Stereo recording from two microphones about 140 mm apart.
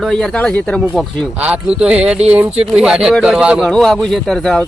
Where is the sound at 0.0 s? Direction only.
5° left (ahead or behind).